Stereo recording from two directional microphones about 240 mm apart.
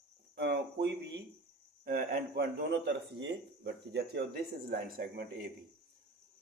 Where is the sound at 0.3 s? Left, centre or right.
Right.